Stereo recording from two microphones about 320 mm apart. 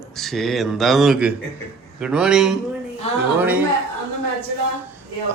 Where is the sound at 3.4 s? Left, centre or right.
Centre.